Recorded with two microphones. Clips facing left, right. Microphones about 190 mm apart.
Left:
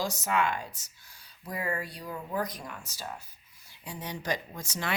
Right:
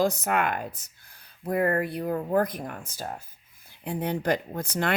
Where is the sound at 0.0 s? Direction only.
55° right (ahead or behind).